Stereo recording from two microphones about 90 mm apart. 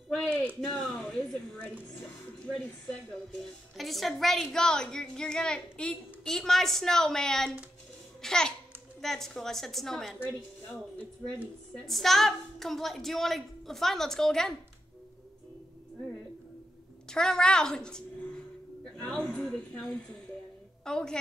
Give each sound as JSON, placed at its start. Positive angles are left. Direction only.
{"t": 0.7, "sound": "a woman's voice", "side_deg": 5}
{"t": 11.7, "sound": "a woman's voice", "side_deg": 0}
{"t": 17.1, "sound": "a woman's voice", "side_deg": 10}
{"t": 18.9, "sound": "a sound", "side_deg": 10}
{"t": 20.8, "sound": "a woman's voice", "side_deg": 10}